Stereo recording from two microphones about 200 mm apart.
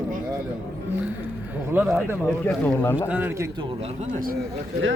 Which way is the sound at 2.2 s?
10° left (ahead or behind).